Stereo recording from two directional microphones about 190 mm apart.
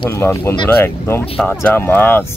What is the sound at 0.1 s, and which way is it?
Speech, 10° left (ahead or behind).